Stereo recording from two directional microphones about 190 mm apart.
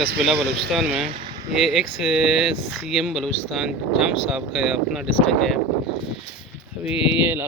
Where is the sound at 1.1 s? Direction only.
25° right (ahead or behind).